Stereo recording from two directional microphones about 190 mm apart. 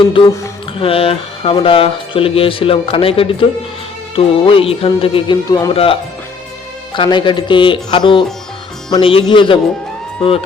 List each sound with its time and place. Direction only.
0.8 s speech: 30° left (ahead or behind)